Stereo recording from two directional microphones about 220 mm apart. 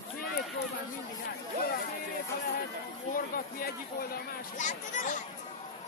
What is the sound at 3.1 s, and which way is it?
Speech, 40° left (ahead or behind).